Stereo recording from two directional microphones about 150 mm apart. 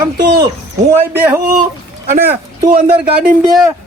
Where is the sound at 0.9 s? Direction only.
10° right (ahead or behind).